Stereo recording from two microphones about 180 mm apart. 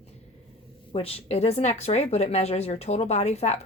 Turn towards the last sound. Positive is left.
turn(degrees=40)  # may be behind; listen again after turning